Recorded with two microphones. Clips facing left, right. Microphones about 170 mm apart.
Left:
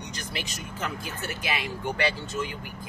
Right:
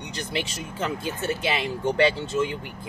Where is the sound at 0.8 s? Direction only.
30° right (ahead or behind).